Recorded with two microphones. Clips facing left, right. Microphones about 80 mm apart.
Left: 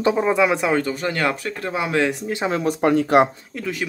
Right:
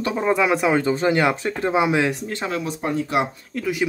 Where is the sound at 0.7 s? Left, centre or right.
Right.